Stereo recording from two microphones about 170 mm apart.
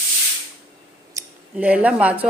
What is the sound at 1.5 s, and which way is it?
Speech, 10° right (ahead or behind).